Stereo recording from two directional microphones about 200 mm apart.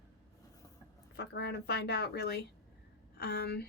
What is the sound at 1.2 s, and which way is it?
Speech, 55° left (ahead or behind).